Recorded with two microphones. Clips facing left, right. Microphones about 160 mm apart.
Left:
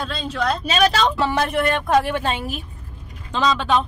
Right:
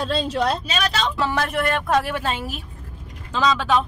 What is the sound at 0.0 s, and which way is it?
Speech, 30° right (ahead or behind).